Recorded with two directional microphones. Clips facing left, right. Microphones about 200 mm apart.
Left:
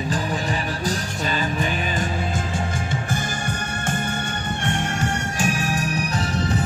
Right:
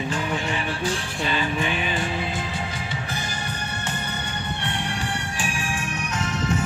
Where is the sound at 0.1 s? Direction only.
35° left (ahead or behind).